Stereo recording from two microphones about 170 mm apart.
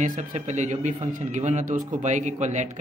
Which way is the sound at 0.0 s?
45° right (ahead or behind).